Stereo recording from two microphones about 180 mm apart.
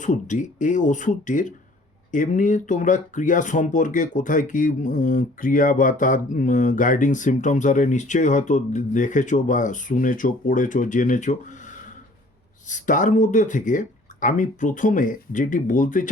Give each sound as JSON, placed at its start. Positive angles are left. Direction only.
{"t": 0.0, "sound": "speech", "side_deg": 45}